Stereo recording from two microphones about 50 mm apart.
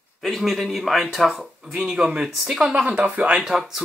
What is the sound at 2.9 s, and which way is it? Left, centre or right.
Speech, right.